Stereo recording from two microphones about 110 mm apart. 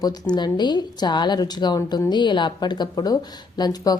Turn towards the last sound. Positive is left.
turn(degrees=40)  # may be behind; listen again after turning